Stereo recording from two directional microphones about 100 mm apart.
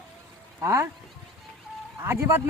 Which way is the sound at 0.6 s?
30° right (ahead or behind).